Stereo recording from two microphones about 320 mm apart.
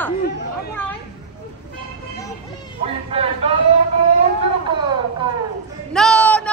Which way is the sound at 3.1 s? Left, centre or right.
Centre.